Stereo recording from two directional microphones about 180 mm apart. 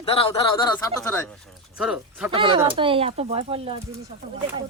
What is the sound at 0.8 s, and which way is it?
Speech, 15° left (ahead or behind).